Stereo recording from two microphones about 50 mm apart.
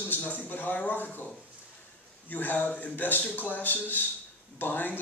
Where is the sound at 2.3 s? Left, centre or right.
Left.